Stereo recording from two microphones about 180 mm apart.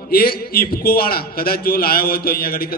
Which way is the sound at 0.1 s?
55° left (ahead or behind).